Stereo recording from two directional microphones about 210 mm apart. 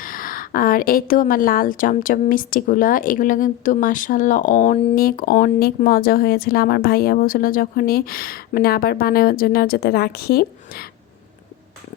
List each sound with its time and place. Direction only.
0.0 s a woman's voice: 40° left (ahead or behind)